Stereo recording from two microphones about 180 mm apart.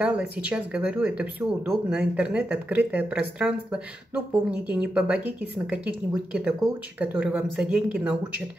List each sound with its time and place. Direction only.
0.0 s speech: 10° right (ahead or behind)